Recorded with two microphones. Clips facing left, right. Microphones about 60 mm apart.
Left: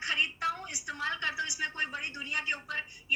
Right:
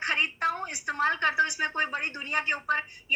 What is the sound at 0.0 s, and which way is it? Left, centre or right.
A woman's voice, right.